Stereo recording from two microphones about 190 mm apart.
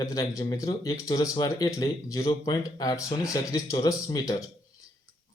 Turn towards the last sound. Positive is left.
turn(degrees=20)  # may be behind; listen again after turning